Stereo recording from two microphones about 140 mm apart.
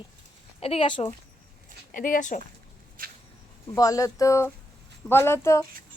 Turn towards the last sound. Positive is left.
turn(degrees=20)  # may be behind; listen again after turning